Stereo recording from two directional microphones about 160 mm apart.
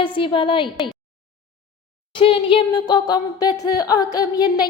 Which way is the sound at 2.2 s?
35° left (ahead or behind).